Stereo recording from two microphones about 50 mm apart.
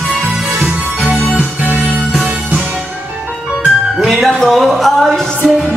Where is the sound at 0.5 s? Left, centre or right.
Right.